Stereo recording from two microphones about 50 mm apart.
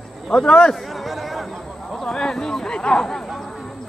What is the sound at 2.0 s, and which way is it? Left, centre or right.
Speech, centre.